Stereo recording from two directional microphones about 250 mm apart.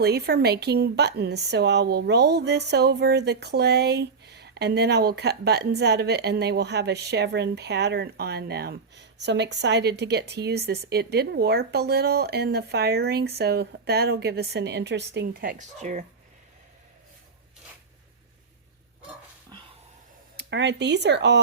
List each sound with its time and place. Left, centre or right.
0.0 s a woman's voice: right
20.3 s speech: right